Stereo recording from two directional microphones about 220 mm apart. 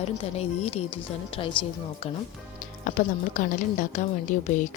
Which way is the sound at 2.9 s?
35° left (ahead or behind).